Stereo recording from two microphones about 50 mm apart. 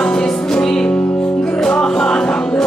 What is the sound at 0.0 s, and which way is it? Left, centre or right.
Music, centre.